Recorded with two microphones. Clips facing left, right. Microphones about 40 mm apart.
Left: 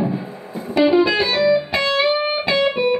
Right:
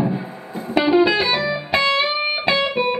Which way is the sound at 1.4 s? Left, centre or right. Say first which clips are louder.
Left 2 dB; right.